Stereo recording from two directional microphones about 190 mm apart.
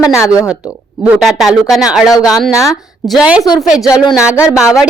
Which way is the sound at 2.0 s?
20° left (ahead or behind).